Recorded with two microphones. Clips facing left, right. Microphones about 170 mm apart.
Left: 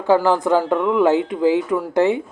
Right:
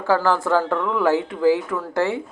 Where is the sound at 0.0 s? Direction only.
20° left (ahead or behind).